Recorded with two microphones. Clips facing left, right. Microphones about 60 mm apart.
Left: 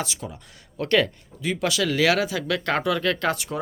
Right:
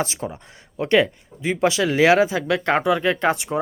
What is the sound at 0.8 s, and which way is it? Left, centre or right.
Speech, right.